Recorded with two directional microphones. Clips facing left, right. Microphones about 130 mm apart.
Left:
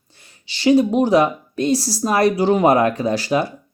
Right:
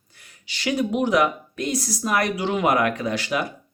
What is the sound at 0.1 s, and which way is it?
Speech, 30° left (ahead or behind).